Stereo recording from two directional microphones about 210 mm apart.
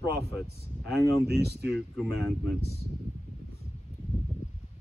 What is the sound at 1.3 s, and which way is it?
Speech, 50° right (ahead or behind).